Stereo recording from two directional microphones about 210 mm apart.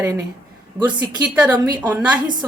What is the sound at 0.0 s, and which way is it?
A woman's voice, 15° right (ahead or behind).